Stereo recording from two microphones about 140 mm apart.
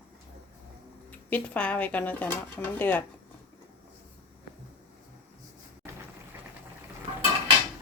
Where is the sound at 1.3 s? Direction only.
10° left (ahead or behind).